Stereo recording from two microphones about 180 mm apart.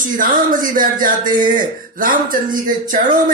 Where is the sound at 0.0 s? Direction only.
50° right (ahead or behind).